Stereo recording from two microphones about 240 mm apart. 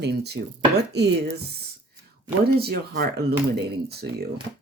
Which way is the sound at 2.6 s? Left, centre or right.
Right.